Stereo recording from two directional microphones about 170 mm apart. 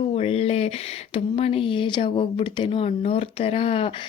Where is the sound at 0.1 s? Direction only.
35° left (ahead or behind).